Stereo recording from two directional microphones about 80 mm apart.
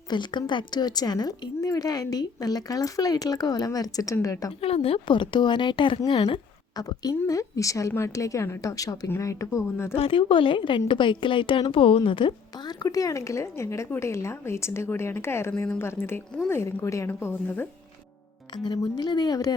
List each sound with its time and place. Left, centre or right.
0.1 s speech: left
5.0 s a woman's voice: left
6.7 s speech: left
9.0 s a woman's voice: left
10.1 s a woman's voice: left
12.8 s a woman's voice: left
18.5 s speech: left